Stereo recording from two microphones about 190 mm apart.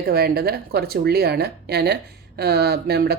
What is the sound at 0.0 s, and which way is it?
Speech, 55° right (ahead or behind).